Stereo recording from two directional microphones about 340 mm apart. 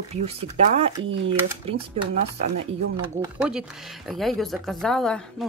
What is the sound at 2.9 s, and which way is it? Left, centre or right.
Speech, centre.